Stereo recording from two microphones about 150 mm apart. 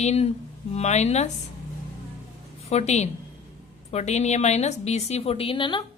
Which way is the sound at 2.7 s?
50° left (ahead or behind).